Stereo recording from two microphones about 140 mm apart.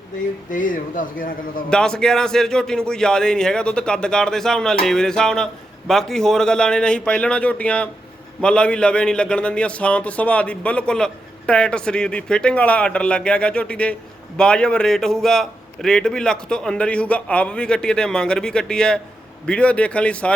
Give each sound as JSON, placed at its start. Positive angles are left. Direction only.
{"t": 0.5, "sound": "a man's voice", "side_deg": 75}
{"t": 1.7, "sound": "a man's voice", "side_deg": 5}